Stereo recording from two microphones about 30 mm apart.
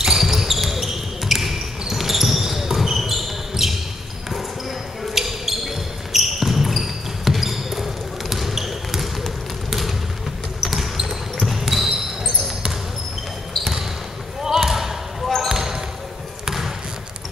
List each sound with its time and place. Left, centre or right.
0.0 s basketball bounce: centre
9.7 s a sound: centre
10.6 s basketball bounce: centre
14.4 s basketball bounce: centre